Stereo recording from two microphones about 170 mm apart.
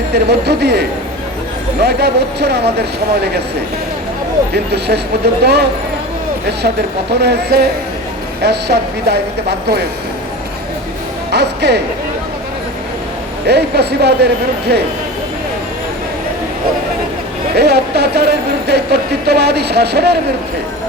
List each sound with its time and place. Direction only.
0.1 s speech: 75° right (ahead or behind)
4.5 s speech: 75° right (ahead or behind)
7.2 s speech: 75° right (ahead or behind)
11.3 s speech: 80° right
13.5 s speech: 75° right (ahead or behind)
17.5 s speech: 75° right (ahead or behind)